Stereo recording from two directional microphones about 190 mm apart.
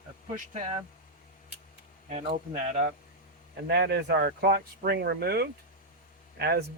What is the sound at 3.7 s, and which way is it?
A man's voice, 60° right (ahead or behind).